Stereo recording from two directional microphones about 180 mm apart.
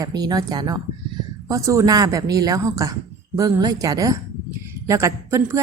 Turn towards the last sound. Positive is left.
turn(degrees=-15)  # may be behind; listen again after turning